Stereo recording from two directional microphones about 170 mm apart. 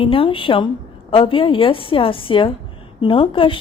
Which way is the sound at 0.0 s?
30° left (ahead or behind).